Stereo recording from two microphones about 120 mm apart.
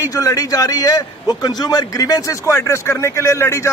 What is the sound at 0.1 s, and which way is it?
A man's voice, 30° left (ahead or behind).